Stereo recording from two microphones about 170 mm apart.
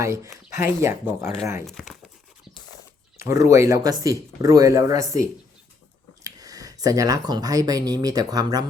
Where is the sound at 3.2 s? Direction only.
20° right (ahead or behind).